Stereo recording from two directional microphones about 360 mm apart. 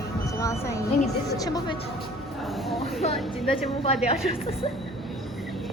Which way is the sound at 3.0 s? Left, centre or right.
Centre.